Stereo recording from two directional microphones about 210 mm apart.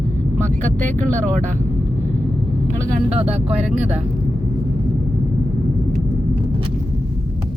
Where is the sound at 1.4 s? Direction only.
35° right (ahead or behind).